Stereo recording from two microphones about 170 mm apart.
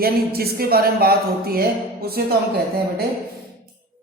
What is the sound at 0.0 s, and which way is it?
A woman's voice, 65° right (ahead or behind).